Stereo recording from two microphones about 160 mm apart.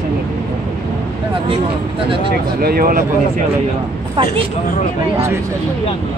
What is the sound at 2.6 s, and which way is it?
Speech, 65° right (ahead or behind).